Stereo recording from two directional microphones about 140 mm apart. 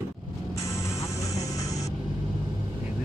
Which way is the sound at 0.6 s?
20° left (ahead or behind).